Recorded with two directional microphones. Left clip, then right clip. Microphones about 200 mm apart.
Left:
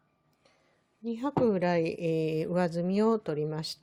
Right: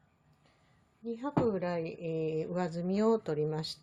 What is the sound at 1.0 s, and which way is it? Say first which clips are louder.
A woman's voice: left 4 dB; 55° left (ahead or behind).